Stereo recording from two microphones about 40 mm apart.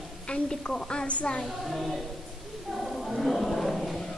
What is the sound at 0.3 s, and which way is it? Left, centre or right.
A woman's voice, left.